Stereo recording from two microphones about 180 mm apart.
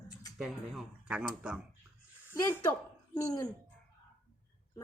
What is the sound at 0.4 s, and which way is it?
Speech, centre (ahead or behind).